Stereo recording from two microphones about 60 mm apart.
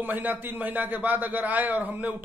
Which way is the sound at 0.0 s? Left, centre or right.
Right.